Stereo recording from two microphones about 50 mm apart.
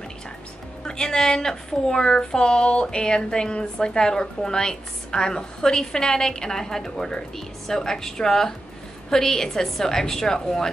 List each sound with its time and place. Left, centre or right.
0.8 s a woman's voice: centre